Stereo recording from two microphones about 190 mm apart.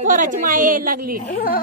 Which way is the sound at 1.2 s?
50° left (ahead or behind).